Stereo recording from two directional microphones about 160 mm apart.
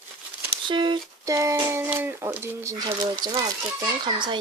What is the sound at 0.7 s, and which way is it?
Speech, 30° right (ahead or behind).